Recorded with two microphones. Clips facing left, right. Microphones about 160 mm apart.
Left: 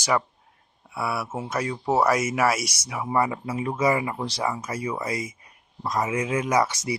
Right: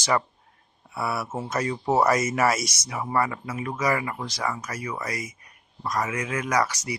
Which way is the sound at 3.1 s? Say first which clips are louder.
Left 2 dB; 20° left (ahead or behind).